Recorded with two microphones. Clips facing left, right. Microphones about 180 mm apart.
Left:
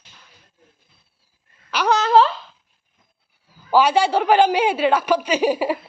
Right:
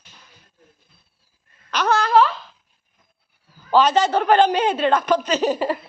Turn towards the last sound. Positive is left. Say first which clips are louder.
# left 1 dB
turn(degrees=10)  # may be behind; listen again after turning